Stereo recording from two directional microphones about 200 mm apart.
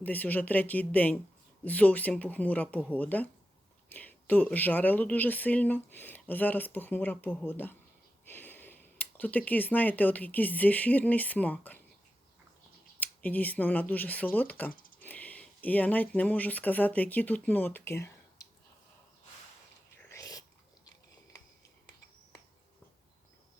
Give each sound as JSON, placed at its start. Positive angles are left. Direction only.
{"t": 0.0, "sound": "speech", "side_deg": 10}
{"t": 13.0, "sound": "speech", "side_deg": 10}
{"t": 14.8, "sound": "a sound", "side_deg": 45}
{"t": 15.0, "sound": "speech", "side_deg": 5}
{"t": 20.1, "sound": "whispering", "side_deg": 15}